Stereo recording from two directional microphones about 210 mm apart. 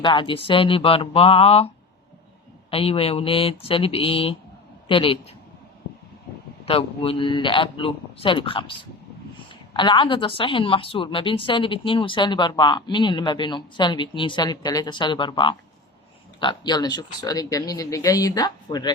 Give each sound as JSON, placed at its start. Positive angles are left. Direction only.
{"t": 0.0, "sound": "a woman's voice", "side_deg": 25}
{"t": 6.7, "sound": "a woman's voice", "side_deg": 25}